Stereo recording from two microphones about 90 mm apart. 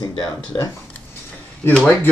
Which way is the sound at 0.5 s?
35° left (ahead or behind).